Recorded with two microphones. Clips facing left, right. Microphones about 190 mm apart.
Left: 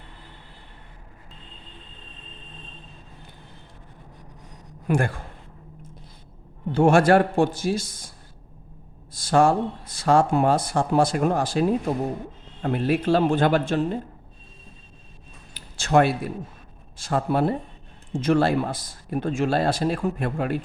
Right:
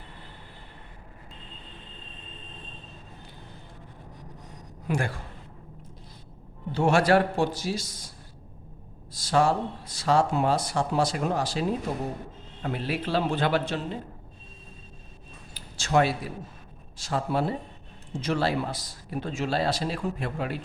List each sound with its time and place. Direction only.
4.9 s a man's voice: 50° left (ahead or behind)
6.7 s a man's voice: 50° left (ahead or behind)
9.1 s a man's voice: 50° left (ahead or behind)
12.6 s a man's voice: 50° left (ahead or behind)
15.5 s a sound: 55° left (ahead or behind)
17.0 s a man's voice: 55° left (ahead or behind)